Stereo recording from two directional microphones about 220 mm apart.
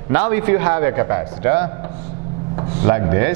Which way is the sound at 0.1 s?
10° right (ahead or behind).